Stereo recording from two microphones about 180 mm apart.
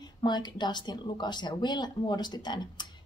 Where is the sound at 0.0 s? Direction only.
25° left (ahead or behind).